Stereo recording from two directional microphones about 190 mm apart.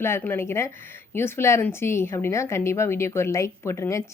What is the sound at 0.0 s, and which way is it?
Speech, 10° left (ahead or behind).